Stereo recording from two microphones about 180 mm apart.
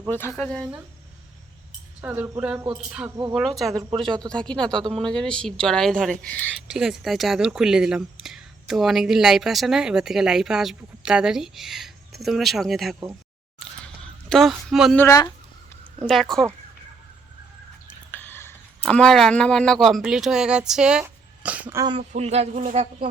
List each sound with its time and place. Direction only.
0.1 s speech: 10° left (ahead or behind)
2.0 s speech: 10° right (ahead or behind)
13.6 s a sound: 5° left (ahead or behind)
14.9 s speech: 15° left (ahead or behind)
16.0 s speech: centre (ahead or behind)
18.1 s speech: 10° left (ahead or behind); by 21.8 s 10° right (ahead or behind)
22.1 s speech: 35° right (ahead or behind)